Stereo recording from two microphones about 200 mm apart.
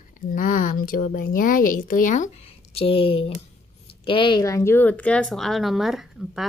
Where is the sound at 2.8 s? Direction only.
30° left (ahead or behind).